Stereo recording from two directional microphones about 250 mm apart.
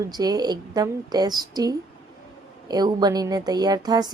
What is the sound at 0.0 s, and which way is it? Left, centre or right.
A woman's voice, centre.